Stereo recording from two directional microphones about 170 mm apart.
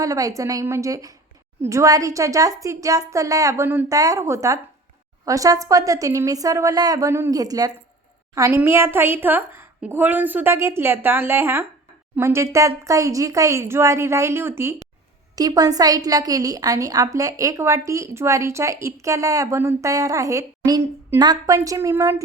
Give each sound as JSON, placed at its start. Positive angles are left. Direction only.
{"t": 0.0, "sound": "a woman's voice", "side_deg": -20}